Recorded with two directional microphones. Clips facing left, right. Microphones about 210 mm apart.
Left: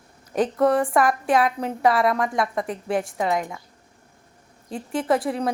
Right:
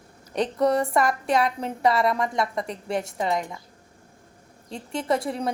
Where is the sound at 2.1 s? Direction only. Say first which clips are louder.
Left 2 dB; centre (ahead or behind).